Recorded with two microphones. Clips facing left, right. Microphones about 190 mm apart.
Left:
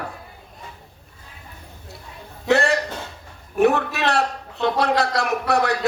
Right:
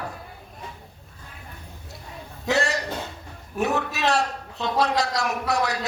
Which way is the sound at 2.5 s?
60° left (ahead or behind).